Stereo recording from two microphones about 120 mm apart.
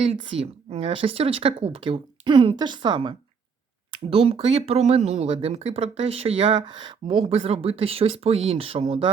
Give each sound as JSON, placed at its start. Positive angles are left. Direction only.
{"t": 0.2, "sound": "a woman's voice", "side_deg": -50}
{"t": 4.1, "sound": "speech", "side_deg": -55}
{"t": 6.7, "sound": "speech", "side_deg": -40}
{"t": 7.2, "sound": "a woman's voice", "side_deg": -55}